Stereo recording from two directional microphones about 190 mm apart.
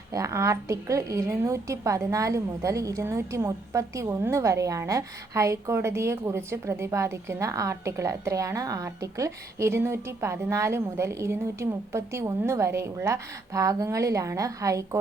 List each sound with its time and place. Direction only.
0.1 s a woman's voice: 15° right (ahead or behind)